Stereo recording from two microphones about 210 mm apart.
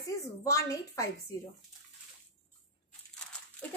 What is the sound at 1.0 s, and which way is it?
Speech, 15° left (ahead or behind).